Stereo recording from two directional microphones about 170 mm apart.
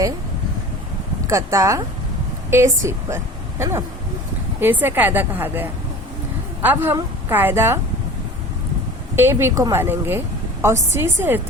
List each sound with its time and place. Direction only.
1.3 s a woman's voice: 20° right (ahead or behind)
9.1 s a woman's voice: 15° right (ahead or behind)